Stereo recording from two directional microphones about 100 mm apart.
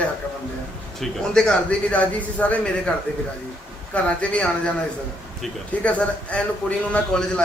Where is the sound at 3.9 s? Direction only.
10° left (ahead or behind).